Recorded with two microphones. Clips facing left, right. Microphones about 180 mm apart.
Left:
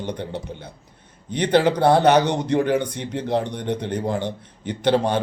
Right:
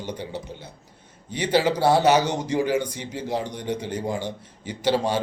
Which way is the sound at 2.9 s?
60° left (ahead or behind).